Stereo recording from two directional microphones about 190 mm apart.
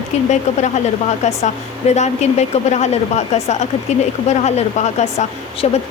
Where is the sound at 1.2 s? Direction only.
35° left (ahead or behind).